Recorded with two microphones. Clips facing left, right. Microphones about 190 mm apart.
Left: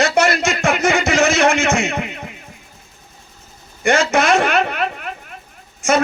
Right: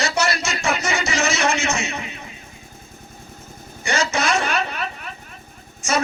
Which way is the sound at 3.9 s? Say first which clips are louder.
Left 7 dB; 55° left (ahead or behind).